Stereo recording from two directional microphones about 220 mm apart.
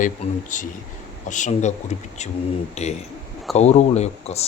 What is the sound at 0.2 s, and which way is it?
Speech, 30° left (ahead or behind).